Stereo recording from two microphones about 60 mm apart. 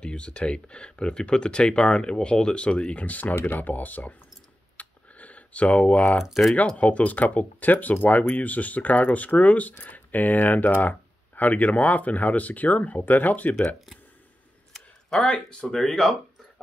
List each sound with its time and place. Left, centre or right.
0.0 s speech: centre
4.7 s computer keyboard: left
6.2 s speech: centre
6.8 s speech: left
14.7 s a sound: centre
15.6 s speech: centre